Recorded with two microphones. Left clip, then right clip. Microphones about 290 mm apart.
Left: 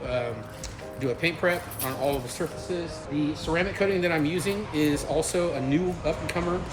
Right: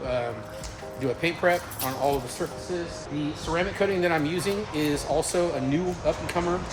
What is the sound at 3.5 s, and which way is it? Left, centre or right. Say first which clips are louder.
Speech: right 1 dB; centre.